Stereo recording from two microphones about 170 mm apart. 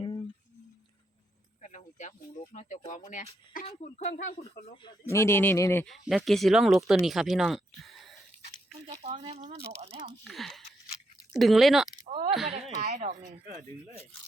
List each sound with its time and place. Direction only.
0.0 s a sound: 30° left (ahead or behind)
1.6 s speech: 45° left (ahead or behind)
4.7 s speech: 25° left (ahead or behind)
5.0 s speech: 15° left (ahead or behind)
5.8 s speech: centre (ahead or behind)
8.9 s speech: 40° right (ahead or behind)
10.2 s speech: centre (ahead or behind)
12.0 s speech: 40° right (ahead or behind)